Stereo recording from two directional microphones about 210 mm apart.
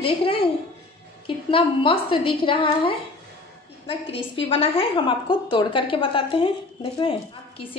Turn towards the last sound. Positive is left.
turn(degrees=25)  # may be behind; listen again after turning